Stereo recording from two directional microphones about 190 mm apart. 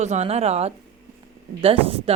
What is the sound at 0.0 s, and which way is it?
Speech, 35° right (ahead or behind).